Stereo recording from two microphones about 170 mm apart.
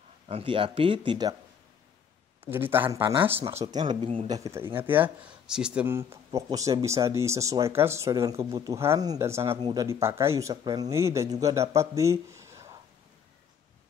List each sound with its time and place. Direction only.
0.3 s speech: 30° right (ahead or behind)
2.5 s speech: 10° right (ahead or behind)
3.7 s speech: 30° right (ahead or behind)